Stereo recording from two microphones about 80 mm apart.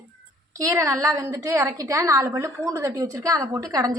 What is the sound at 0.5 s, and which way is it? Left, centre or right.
A woman's voice, right.